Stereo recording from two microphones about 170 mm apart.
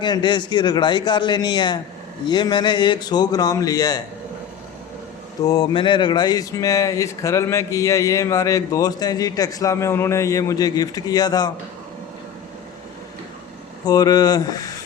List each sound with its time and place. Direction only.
0.0 s speech: 25° left (ahead or behind)
5.5 s speech: 25° left (ahead or behind)
13.8 s speech: 20° left (ahead or behind)